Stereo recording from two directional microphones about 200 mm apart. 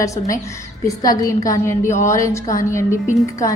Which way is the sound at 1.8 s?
40° left (ahead or behind).